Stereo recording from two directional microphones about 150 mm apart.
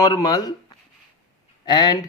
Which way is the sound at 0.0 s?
25° left (ahead or behind).